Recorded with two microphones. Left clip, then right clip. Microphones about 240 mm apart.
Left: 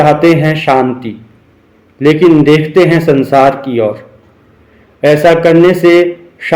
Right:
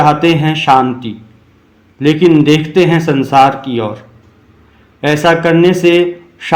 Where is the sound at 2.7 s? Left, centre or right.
Right.